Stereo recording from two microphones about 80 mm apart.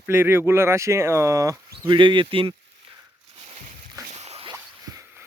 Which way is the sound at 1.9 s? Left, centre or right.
Right.